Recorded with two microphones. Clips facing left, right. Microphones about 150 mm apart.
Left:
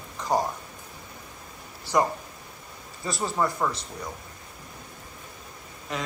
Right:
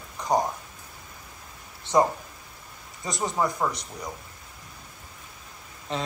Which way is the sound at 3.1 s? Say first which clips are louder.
Even; 20° right (ahead or behind).